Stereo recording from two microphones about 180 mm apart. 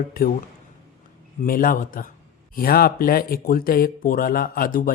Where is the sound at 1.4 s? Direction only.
50° left (ahead or behind).